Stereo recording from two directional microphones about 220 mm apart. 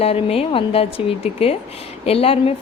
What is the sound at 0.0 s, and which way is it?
A woman's voice, 25° left (ahead or behind).